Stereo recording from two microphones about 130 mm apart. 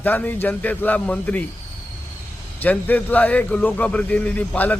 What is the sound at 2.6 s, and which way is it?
A man's voice, 15° left (ahead or behind).